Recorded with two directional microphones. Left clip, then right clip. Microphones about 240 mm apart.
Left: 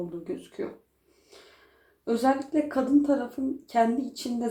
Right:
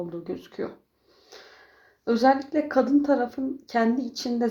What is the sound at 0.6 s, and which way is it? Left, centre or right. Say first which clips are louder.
Speech: right 2 dB; right.